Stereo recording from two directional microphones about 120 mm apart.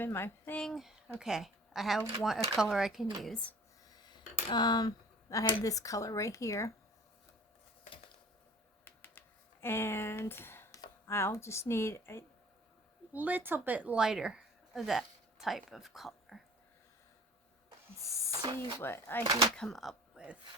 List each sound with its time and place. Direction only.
0.0 s speech: 20° left (ahead or behind)
0.6 s speech: centre (ahead or behind)
4.0 s speech: 35° left (ahead or behind)
8.8 s typing: 20° left (ahead or behind)
11.0 s speech: 20° left (ahead or behind)
13.1 s speech: 15° right (ahead or behind)
18.8 s speech: 20° left (ahead or behind)
19.2 s speech: 30° right (ahead or behind)
19.5 s speech: 5° left (ahead or behind)